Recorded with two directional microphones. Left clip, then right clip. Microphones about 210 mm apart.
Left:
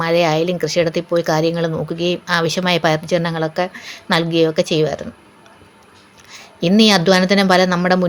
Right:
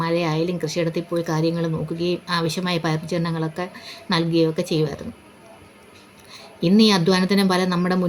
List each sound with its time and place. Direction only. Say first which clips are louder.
0.0 s speech: left 7 dB; 30° left (ahead or behind)
6.3 s speech: left 4 dB; 25° left (ahead or behind)